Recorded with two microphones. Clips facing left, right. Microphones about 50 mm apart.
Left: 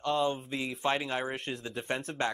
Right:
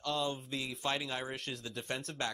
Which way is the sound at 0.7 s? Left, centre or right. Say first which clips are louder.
Left 6 dB; left.